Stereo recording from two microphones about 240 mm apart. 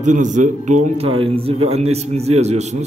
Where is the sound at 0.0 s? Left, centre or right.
Right.